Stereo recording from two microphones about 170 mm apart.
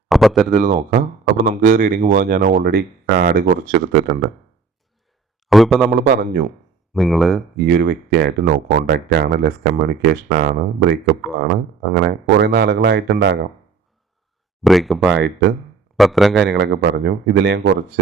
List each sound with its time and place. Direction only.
0.1 s a sound: centre (ahead or behind)
0.5 s speech: 55° right (ahead or behind)
5.5 s speech: centre (ahead or behind)
5.9 s speech: 65° right (ahead or behind)
6.9 s speech: centre (ahead or behind)
7.7 s speech: 70° right (ahead or behind)
14.6 s speech: centre (ahead or behind)
15.1 s speech: 90° right
16.0 s speech: centre (ahead or behind)
16.5 s speech: 85° right